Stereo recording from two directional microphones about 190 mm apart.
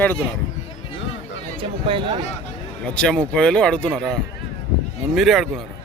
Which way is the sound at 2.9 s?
5° left (ahead or behind).